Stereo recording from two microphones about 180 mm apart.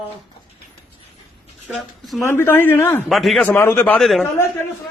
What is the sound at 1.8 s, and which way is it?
Speech, centre (ahead or behind).